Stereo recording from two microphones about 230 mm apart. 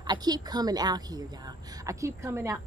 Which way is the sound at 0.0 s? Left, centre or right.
Centre.